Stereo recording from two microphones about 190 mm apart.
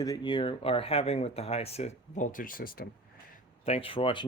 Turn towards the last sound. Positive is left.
turn(degrees=25)  # may be behind; listen again after turning